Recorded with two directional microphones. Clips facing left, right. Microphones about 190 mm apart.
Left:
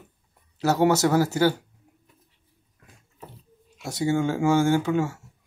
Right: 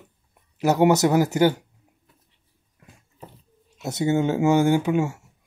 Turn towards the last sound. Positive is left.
turn(degrees=-15)  # may be behind; listen again after turning